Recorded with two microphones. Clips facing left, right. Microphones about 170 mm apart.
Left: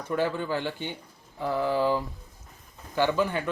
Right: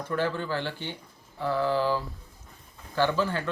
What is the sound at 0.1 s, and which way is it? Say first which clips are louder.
A man's voice: left 2 dB; 15° left (ahead or behind).